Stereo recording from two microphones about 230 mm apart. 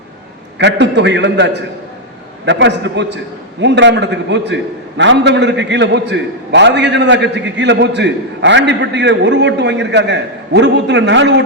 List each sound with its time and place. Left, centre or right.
0.6 s a man's voice: right